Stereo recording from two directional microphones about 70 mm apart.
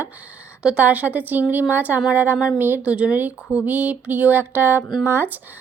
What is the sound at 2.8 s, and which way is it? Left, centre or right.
Speech, centre.